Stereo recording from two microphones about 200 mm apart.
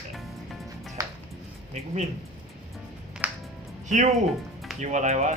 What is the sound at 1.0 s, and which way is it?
Music, 15° right (ahead or behind).